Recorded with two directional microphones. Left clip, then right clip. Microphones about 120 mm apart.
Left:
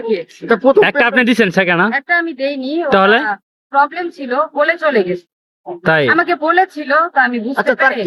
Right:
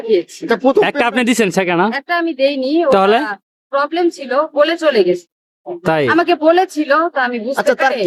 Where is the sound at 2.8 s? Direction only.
25° right (ahead or behind).